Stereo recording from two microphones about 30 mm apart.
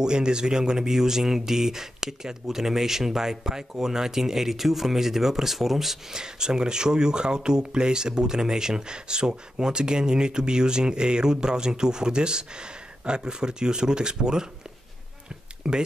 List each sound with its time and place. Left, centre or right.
0.0 s speech: right; by 5.9 s centre
6.1 s speech: right
15.7 s speech: centre